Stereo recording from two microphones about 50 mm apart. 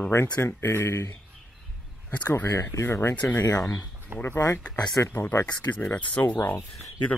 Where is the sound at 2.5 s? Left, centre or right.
Left.